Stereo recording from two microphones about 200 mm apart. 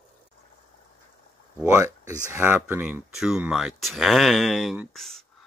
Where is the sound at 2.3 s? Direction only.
10° right (ahead or behind).